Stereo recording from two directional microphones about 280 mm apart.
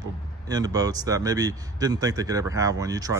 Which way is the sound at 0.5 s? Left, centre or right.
Centre.